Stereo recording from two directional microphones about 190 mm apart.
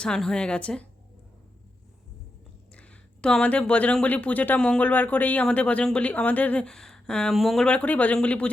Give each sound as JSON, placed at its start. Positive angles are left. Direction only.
{"t": 0.0, "sound": "a woman's voice", "side_deg": 5}
{"t": 2.7, "sound": "speech", "side_deg": 5}